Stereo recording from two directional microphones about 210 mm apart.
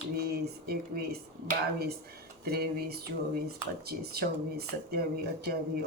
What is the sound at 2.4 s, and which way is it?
Speech, 50° right (ahead or behind).